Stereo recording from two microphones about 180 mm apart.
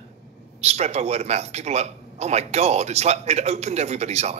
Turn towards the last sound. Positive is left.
turn(degrees=-35)  # may be behind; listen again after turning